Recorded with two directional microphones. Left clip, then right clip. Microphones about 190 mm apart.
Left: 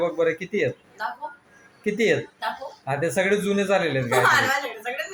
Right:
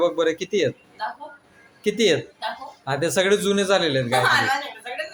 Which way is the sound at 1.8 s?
15° right (ahead or behind).